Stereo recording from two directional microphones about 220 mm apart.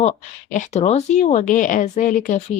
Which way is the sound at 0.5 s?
30° left (ahead or behind).